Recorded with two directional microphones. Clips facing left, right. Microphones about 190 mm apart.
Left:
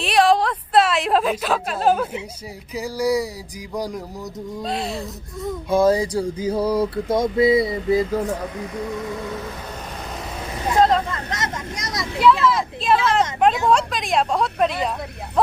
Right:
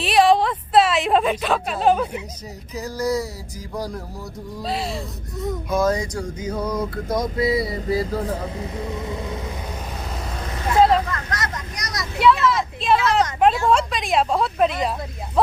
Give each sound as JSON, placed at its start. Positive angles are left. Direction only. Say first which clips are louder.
{"t": 0.0, "sound": "a woman's voice", "louder": "right 1 dB", "side_deg": 0}
{"t": 2.7, "sound": "speech", "louder": "left 2 dB", "side_deg": 10}
{"t": 4.6, "sound": "a woman's voice", "louder": "even", "side_deg": 0}
{"t": 5.6, "sound": "a sound", "louder": "left 5 dB", "side_deg": 30}
{"t": 8.6, "sound": "vehicle", "louder": "left 1 dB", "side_deg": -20}
{"t": 10.8, "sound": "vehicle", "louder": "right 1 dB", "side_deg": -5}
{"t": 11.0, "sound": "a sound", "louder": "left 1 dB", "side_deg": 25}
{"t": 12.2, "sound": "a woman's voice", "louder": "left 1 dB", "side_deg": 0}